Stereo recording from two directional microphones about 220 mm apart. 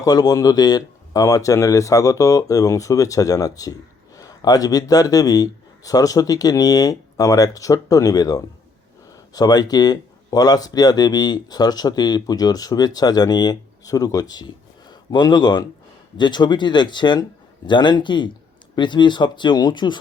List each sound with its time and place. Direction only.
0.0 s speech: 15° left (ahead or behind)